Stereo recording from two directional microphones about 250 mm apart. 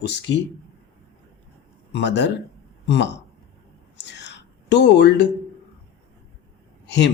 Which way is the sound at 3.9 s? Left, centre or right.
Left.